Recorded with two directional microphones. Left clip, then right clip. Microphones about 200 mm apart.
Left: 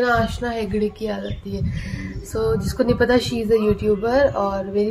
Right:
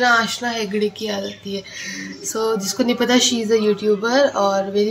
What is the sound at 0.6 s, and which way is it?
Speech, centre (ahead or behind).